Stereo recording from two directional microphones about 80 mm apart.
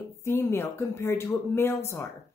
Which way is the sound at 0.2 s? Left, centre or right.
Left.